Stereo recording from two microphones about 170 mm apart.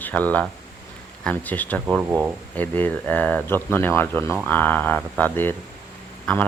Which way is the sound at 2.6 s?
10° left (ahead or behind).